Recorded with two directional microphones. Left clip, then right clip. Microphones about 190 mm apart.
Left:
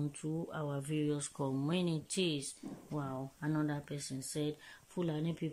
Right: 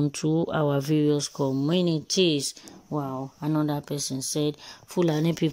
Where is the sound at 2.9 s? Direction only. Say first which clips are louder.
Right 11 dB; 20° right (ahead or behind).